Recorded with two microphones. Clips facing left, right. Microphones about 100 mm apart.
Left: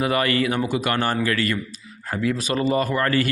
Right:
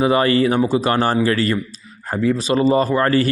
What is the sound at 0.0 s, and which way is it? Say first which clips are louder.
A man's voice: right 6 dB; 30° right (ahead or behind).